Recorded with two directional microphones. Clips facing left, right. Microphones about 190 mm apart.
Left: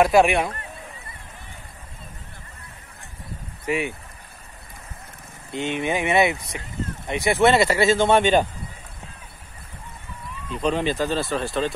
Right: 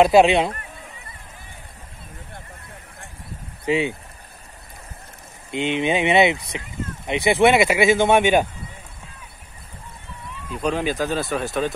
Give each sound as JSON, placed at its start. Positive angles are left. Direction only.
{"t": 0.0, "sound": "speech", "side_deg": -20}
{"t": 3.6, "sound": "speech", "side_deg": -20}
{"t": 5.5, "sound": "speech", "side_deg": -20}
{"t": 10.5, "sound": "speech", "side_deg": -5}